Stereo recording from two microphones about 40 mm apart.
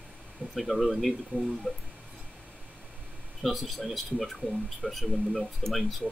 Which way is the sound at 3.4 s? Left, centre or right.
Centre.